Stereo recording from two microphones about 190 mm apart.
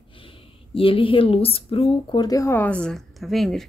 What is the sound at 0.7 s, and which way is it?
Speech, 30° left (ahead or behind).